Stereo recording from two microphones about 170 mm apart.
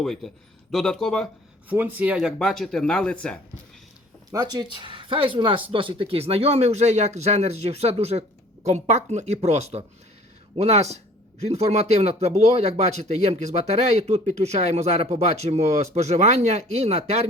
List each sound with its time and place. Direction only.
0.0 s speech: centre (ahead or behind)
1.7 s speech: 10° right (ahead or behind); by 3.4 s 5° left (ahead or behind)
4.3 s speech: 20° right (ahead or behind); by 17.2 s 40° right (ahead or behind)